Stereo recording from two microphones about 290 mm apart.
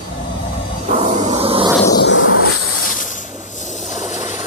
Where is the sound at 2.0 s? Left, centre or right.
Left.